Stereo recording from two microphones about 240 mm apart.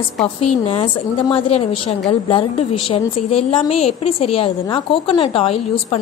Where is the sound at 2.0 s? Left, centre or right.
Left.